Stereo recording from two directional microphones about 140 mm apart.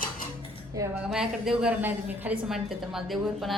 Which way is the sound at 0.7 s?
20° right (ahead or behind).